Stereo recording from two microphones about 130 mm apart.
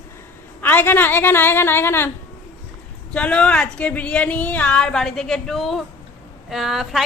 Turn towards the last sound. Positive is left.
turn(degrees=0)  # may be behind; listen again after turning